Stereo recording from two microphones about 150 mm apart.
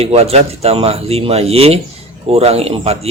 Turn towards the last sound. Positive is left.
turn(degrees=-40)  # may be behind; listen again after turning